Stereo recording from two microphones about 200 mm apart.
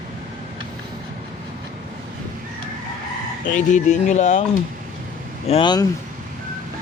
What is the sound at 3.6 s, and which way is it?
Speech, 40° left (ahead or behind).